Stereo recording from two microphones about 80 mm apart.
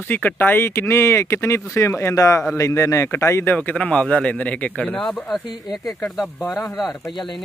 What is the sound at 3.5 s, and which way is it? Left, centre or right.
Speech, centre.